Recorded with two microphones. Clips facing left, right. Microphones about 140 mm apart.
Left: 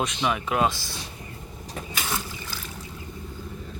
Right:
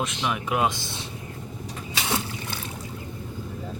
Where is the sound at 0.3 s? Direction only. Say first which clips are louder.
Left 1 dB; 10° right (ahead or behind).